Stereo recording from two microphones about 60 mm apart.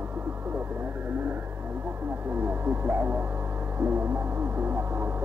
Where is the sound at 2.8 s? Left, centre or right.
Right.